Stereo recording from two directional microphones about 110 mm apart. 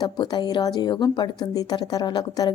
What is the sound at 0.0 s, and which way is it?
A woman's voice, 40° left (ahead or behind).